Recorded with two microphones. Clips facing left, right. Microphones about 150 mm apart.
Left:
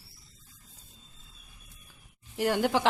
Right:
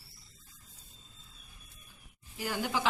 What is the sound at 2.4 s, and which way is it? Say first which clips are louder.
Speech: left 8 dB; 80° left.